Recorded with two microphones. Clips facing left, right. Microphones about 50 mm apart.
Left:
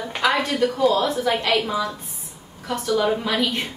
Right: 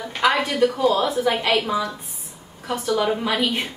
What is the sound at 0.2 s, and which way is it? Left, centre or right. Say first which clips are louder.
A woman's voice: right 2 dB; centre.